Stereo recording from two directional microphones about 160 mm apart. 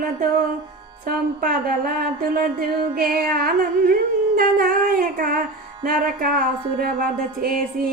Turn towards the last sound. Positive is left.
turn(degrees=-65)  # may be behind; listen again after turning